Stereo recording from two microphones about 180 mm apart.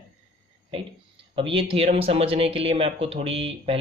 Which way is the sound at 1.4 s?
30° right (ahead or behind).